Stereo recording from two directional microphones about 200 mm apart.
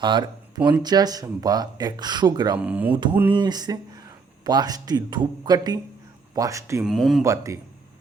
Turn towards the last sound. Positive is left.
turn(degrees=-15)  # may be behind; listen again after turning